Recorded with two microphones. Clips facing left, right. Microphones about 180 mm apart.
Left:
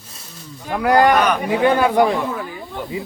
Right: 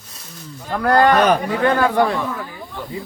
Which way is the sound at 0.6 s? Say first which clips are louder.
Left 1 dB; 15° left (ahead or behind).